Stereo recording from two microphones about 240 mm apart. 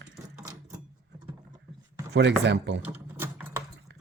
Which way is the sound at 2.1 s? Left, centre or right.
Right.